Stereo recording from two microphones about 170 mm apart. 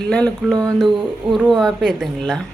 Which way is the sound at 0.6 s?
20° right (ahead or behind).